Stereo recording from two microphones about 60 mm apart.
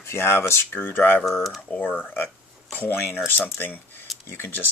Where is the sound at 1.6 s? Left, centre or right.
Left.